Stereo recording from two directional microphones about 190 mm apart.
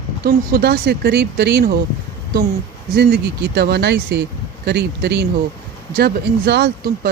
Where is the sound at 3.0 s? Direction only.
60° right (ahead or behind).